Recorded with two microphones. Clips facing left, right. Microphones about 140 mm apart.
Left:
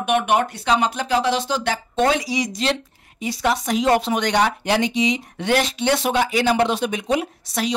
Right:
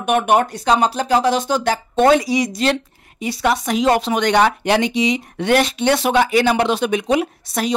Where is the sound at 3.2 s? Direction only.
65° right (ahead or behind).